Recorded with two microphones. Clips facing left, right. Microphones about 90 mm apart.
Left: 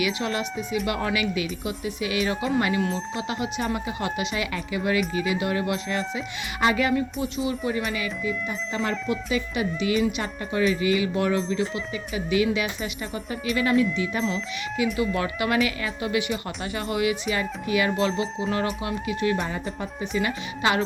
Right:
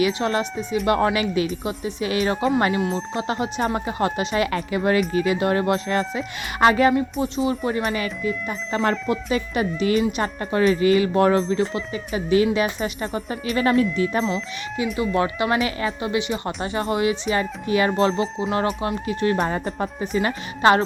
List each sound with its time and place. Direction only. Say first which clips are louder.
0.0 s a woman's voice: right 5 dB; 35° right (ahead or behind)
14.9 s speech: right 4 dB; 30° right (ahead or behind)